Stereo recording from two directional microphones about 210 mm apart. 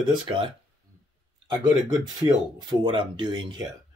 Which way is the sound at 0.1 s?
25° right (ahead or behind).